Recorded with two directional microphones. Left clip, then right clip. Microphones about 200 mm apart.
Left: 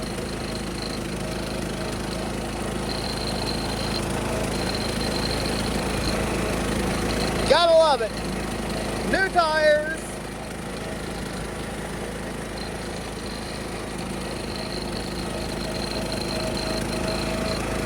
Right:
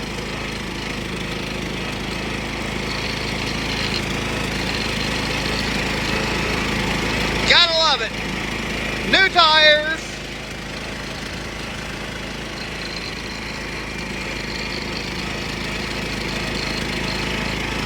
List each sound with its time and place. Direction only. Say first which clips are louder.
7.5 s vehicle: right 1 dB; 15° left (ahead or behind)
9.1 s vehicle: right 8 dB; centre (ahead or behind)